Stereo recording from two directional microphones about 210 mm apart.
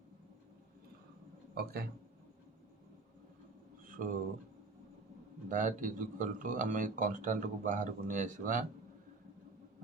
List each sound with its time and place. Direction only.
1.5 s a man's voice: 45° right (ahead or behind)
3.8 s a sound: 40° right (ahead or behind)
5.5 s speech: 40° right (ahead or behind)